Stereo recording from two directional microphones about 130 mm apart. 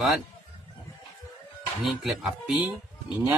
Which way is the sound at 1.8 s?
Centre (ahead or behind).